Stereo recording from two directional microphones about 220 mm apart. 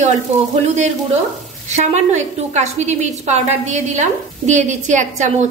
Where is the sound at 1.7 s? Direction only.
30° right (ahead or behind).